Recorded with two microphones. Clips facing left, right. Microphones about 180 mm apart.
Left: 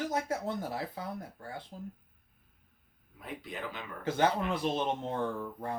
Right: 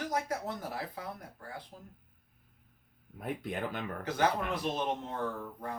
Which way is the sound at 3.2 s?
55° right (ahead or behind).